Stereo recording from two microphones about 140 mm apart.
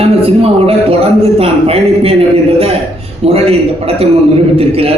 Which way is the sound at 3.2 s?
45° right (ahead or behind).